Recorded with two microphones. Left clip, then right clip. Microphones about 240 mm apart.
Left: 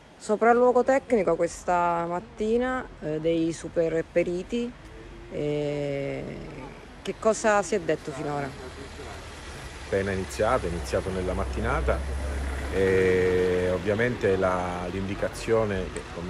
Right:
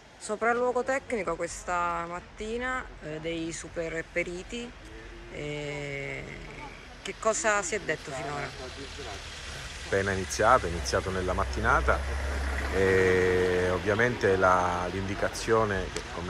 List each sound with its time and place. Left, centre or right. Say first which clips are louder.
0.3 s a woman's voice: left 7 dB; centre
9.8 s speech: left 1 dB; centre